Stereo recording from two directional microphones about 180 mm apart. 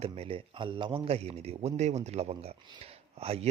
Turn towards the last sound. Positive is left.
turn(degrees=-35)  # may be behind; listen again after turning